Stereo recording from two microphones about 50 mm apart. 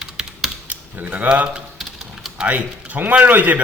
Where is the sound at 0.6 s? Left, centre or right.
Right.